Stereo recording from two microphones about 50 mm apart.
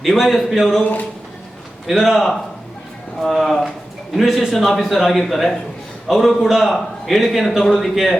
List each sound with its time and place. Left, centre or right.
0.0 s a man's voice: centre
1.9 s a man's voice: centre